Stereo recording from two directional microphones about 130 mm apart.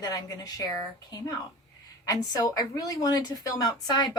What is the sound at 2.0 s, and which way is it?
Speech, 30° left (ahead or behind).